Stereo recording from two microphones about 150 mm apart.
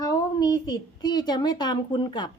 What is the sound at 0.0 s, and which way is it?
A woman's voice, 25° left (ahead or behind).